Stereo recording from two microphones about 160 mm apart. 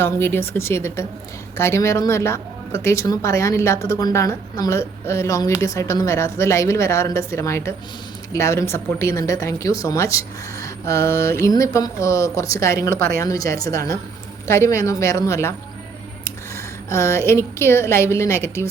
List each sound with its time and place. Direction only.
0.0 s speech: 15° left (ahead or behind)